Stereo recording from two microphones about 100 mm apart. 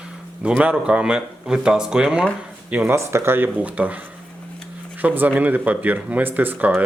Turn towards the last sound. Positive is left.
turn(degrees=-15)  # may be behind; listen again after turning